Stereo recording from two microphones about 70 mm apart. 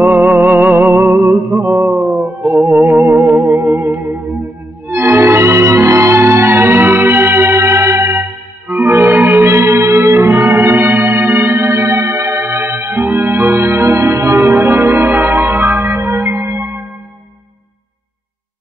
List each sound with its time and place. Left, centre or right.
0.0 s music: right
1.2 s music: right
1.7 s music: right
2.0 s music: right
2.5 s music: right